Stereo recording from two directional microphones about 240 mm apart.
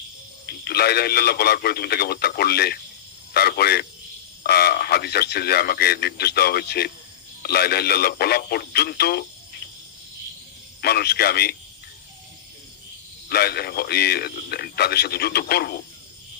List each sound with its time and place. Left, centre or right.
0.5 s speech: left
10.8 s speech: left
13.3 s speech: left